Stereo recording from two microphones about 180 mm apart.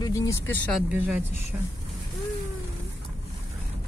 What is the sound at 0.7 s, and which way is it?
Speech, 10° right (ahead or behind).